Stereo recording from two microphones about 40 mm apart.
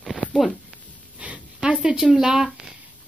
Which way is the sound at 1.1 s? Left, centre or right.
Right.